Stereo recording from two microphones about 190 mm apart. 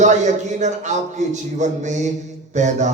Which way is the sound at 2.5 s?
40° right (ahead or behind).